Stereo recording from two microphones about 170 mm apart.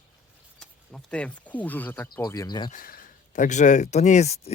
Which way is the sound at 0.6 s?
5° left (ahead or behind).